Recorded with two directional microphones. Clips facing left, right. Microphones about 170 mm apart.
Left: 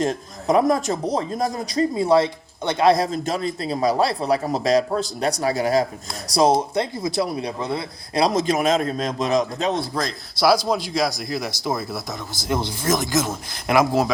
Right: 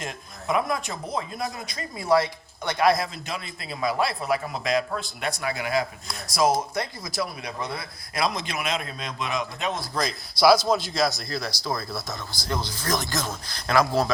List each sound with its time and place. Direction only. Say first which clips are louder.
0.0 s a man's voice: left 11 dB; 40° left (ahead or behind)
9.9 s speech: left 2 dB; centre (ahead or behind); by 14.1 s 15° left (ahead or behind)